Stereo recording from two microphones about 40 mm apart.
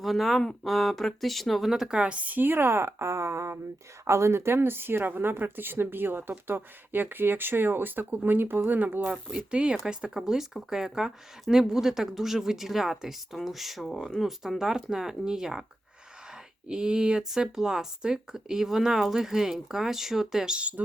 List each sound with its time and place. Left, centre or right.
0.0 s speech: centre
1.7 s speech: centre
2.0 s a woman's voice: right
2.3 s speech: right
4.4 s speech: right
9.0 s speech: right
10.2 s speech: centre
16.6 s speech: centre
20.4 s speech: right